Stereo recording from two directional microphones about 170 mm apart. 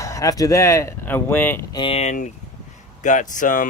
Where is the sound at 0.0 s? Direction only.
20° left (ahead or behind).